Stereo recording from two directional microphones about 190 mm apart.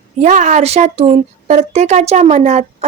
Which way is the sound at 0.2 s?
40° right (ahead or behind).